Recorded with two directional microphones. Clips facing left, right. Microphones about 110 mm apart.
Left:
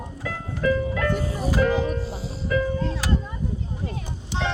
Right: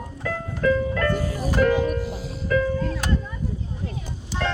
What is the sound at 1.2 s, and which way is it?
Music, 25° left (ahead or behind).